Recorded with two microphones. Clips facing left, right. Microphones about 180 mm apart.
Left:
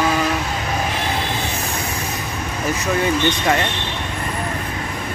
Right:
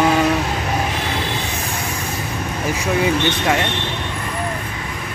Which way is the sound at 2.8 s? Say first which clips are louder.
Right 1 dB; 5° right (ahead or behind).